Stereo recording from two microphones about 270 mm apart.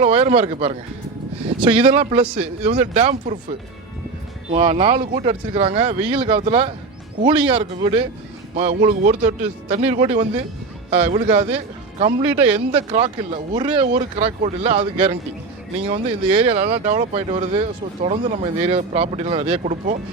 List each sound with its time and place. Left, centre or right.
0.0 s speech: right
4.5 s speech: centre